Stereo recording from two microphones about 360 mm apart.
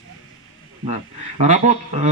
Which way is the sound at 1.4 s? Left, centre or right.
Centre.